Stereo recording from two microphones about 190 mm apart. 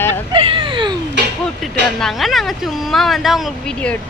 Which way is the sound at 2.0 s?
Centre (ahead or behind).